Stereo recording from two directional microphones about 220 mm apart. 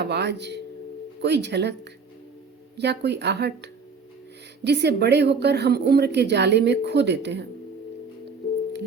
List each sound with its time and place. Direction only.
0.0 s a woman's voice: 50° right (ahead or behind)